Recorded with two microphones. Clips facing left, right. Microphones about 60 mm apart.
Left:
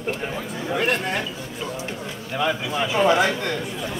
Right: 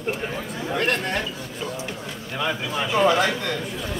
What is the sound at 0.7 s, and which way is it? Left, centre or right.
Speech, centre.